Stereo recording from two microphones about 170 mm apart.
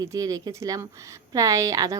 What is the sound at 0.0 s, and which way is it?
A woman's voice, 20° right (ahead or behind).